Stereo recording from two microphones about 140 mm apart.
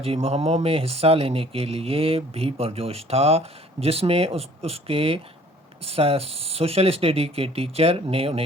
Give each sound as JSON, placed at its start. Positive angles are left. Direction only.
{"t": 0.0, "sound": "speech", "side_deg": -45}